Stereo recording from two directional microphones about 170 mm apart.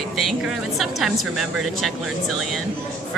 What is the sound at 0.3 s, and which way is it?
A woman's voice, centre (ahead or behind).